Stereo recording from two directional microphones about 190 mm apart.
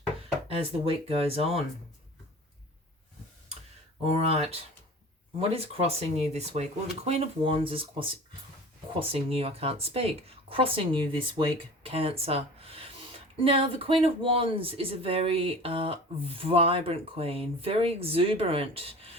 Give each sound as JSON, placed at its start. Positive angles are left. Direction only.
{"t": 0.4, "sound": "a woman's voice", "side_deg": -30}
{"t": 4.0, "sound": "a woman's voice", "side_deg": -35}